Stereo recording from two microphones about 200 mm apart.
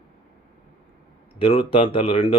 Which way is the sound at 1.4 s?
25° left (ahead or behind).